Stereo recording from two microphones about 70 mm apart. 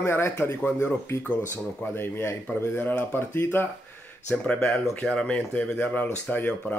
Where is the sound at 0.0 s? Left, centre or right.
Left.